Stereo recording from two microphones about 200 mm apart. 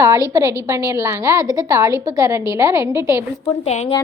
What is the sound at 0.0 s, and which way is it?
A woman's voice, 15° right (ahead or behind).